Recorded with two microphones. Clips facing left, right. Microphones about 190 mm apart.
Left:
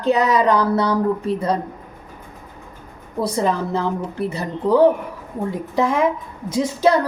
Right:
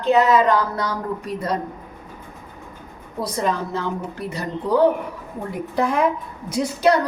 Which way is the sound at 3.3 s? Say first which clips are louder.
Left 2 dB; 30° left (ahead or behind).